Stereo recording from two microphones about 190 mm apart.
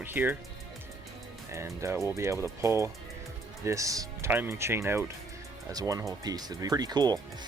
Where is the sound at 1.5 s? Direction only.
15° right (ahead or behind).